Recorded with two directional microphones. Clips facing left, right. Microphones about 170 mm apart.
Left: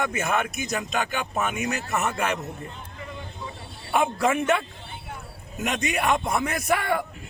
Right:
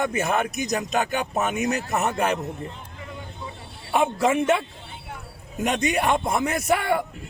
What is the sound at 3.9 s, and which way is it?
A man's voice, 30° right (ahead or behind).